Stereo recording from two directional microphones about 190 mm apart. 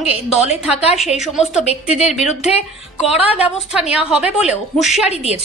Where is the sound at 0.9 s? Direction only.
Centre (ahead or behind).